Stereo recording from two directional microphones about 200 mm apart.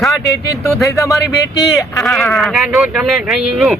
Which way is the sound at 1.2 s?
55° left (ahead or behind).